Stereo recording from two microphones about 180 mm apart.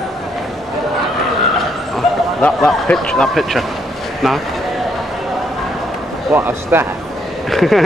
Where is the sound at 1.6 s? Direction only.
Centre (ahead or behind).